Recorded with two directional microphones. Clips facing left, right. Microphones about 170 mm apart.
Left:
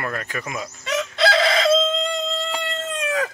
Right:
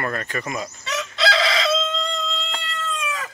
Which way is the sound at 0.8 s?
55° left (ahead or behind).